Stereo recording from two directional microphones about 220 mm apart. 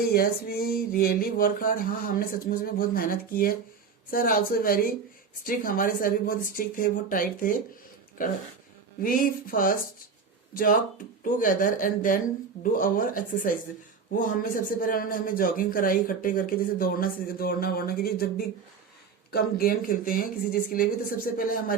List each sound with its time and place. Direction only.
0.0 s a man's voice: 45° left (ahead or behind)
9.0 s a man's voice: 40° left (ahead or behind)